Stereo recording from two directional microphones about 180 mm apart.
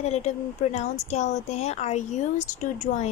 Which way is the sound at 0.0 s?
40° left (ahead or behind).